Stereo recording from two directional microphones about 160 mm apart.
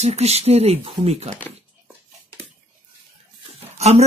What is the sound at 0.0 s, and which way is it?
Speech, 40° right (ahead or behind).